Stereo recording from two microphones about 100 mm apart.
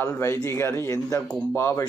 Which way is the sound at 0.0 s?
30° left (ahead or behind).